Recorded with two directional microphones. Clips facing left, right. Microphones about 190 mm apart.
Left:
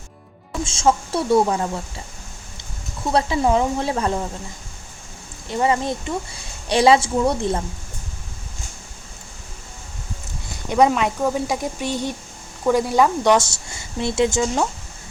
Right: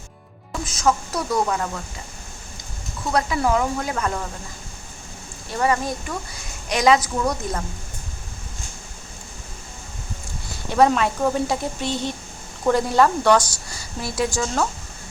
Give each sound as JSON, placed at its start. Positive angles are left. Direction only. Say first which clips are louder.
{"t": 0.6, "sound": "speech", "louder": "left 2 dB", "side_deg": 25}
{"t": 3.1, "sound": "speech", "louder": "left 2 dB", "side_deg": 30}
{"t": 5.5, "sound": "speech", "louder": "left 2 dB", "side_deg": 20}
{"t": 10.7, "sound": "speech", "louder": "left 1 dB", "side_deg": 15}